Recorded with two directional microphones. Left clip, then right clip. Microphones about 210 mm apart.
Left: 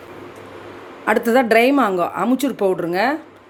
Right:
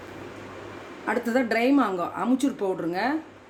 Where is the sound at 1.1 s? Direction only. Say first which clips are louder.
Left 10 dB; 40° left (ahead or behind).